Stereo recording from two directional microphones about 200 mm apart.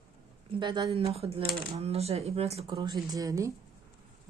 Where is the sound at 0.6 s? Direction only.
20° right (ahead or behind).